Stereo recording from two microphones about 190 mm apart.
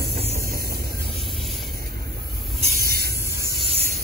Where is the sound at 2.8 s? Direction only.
55° right (ahead or behind).